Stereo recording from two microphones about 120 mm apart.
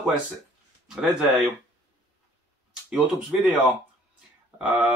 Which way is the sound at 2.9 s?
10° right (ahead or behind).